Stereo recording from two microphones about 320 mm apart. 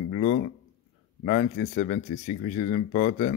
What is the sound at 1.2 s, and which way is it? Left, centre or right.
Speech, left.